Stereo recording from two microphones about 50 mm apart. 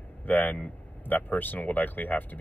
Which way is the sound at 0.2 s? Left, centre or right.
Left.